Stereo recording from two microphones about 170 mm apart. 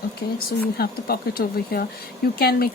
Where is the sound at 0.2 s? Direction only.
65° left (ahead or behind).